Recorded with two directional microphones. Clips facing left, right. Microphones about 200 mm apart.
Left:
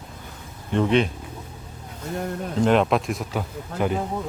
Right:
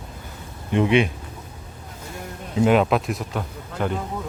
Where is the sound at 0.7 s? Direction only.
10° right (ahead or behind).